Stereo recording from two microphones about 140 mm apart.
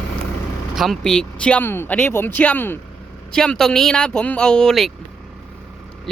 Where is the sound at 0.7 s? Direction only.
Centre (ahead or behind).